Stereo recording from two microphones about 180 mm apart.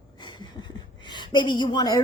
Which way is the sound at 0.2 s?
25° left (ahead or behind).